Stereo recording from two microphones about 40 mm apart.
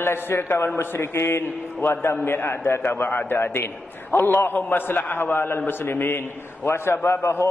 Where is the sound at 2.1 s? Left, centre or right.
Left.